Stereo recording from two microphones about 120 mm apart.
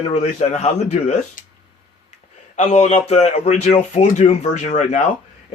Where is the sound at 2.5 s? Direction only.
70° left (ahead or behind).